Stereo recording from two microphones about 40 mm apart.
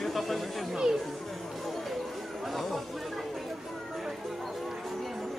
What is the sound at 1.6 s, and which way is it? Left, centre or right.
Music, centre.